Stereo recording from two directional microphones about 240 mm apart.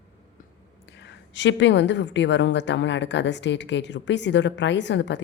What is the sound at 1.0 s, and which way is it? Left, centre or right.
A woman's voice, left.